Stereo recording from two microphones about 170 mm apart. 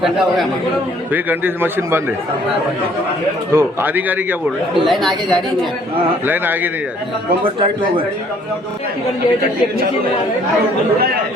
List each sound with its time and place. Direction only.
0.0 s speech: centre (ahead or behind)
1.1 s speech: 10° right (ahead or behind)
3.5 s speech: 15° right (ahead or behind)
4.9 s speech: centre (ahead or behind)
6.2 s speech: 10° right (ahead or behind)
7.4 s a man's voice: 30° right (ahead or behind)